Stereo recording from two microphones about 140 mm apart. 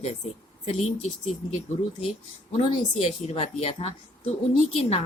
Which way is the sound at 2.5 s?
45° left (ahead or behind).